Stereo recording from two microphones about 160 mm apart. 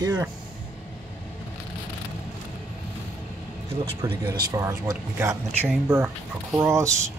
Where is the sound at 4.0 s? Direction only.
15° right (ahead or behind).